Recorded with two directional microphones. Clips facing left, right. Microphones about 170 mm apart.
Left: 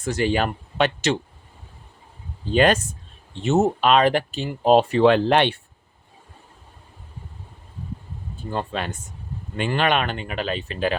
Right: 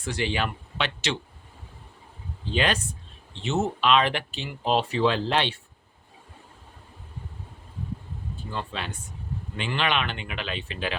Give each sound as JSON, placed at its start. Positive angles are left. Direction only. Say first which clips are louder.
{"t": 0.0, "sound": "speech", "louder": "left 6 dB", "side_deg": 45}
{"t": 2.4, "sound": "speech", "louder": "left 8 dB", "side_deg": 45}
{"t": 8.4, "sound": "speech", "louder": "left 7 dB", "side_deg": 50}